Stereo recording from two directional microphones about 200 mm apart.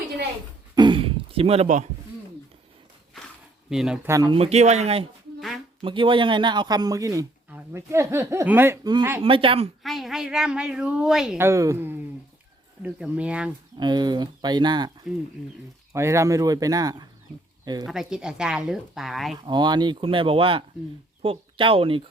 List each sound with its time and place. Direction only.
0.8 s throat clearing: 25° right (ahead or behind)
3.7 s speech: 5° right (ahead or behind); by 9.6 s 25° right (ahead or behind)
9.8 s a woman's voice: centre (ahead or behind)
13.7 s speech: 20° right (ahead or behind)
15.1 s a woman's voice: 5° right (ahead or behind)
15.9 s speech: 15° right (ahead or behind)
17.8 s a woman's voice: centre (ahead or behind)
19.4 s speech: 20° right (ahead or behind)